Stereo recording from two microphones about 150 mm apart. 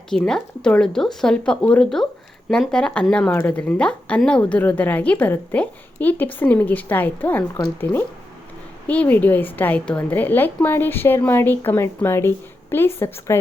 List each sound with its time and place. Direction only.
0.1 s a woman's voice: 5° left (ahead or behind)
8.9 s a woman's voice: 10° left (ahead or behind)